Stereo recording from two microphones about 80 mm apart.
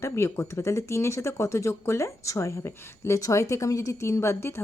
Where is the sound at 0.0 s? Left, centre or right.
Left.